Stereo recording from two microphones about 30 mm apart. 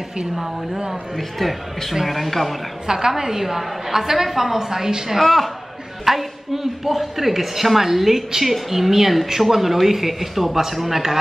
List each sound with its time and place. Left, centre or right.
1.1 s speech: centre
2.9 s a woman's voice: centre
5.2 s a man's voice: centre
6.0 s a woman's voice: centre
10.5 s a woman's voice: centre